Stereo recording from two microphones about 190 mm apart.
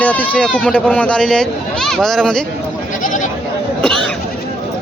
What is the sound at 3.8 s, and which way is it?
Goat, 5° left (ahead or behind).